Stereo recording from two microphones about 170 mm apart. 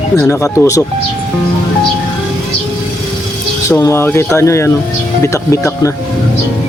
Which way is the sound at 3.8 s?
15° left (ahead or behind).